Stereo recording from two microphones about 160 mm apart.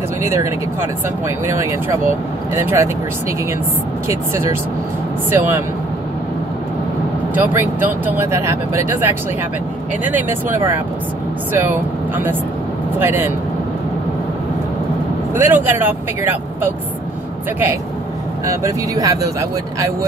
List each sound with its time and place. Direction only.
0.2 s speech: 15° right (ahead or behind)
4.1 s speech: 15° right (ahead or behind)
7.3 s speech: 15° right (ahead or behind)
10.1 s speech: 10° right (ahead or behind)
15.3 s speech: 15° right (ahead or behind)
18.4 s speech: 20° right (ahead or behind)